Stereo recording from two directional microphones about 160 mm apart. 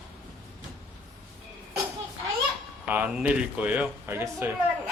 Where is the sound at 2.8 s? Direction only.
10° right (ahead or behind).